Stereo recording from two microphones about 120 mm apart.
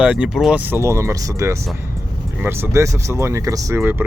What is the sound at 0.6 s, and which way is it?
Speech, 20° right (ahead or behind).